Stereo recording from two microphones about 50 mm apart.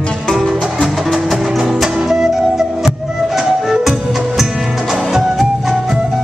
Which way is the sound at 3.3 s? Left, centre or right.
Centre.